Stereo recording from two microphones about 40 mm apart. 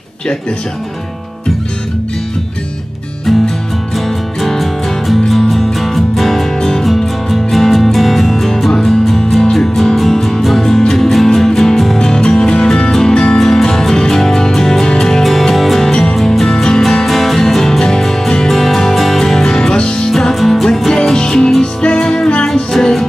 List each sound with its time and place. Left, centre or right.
4.4 s music: centre
12.0 s music: centre
20.1 s music: centre